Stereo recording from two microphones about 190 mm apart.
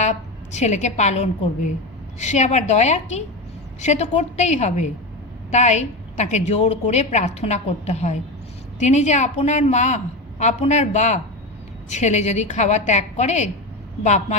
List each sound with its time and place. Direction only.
0.0 s a woman's voice: 35° left (ahead or behind)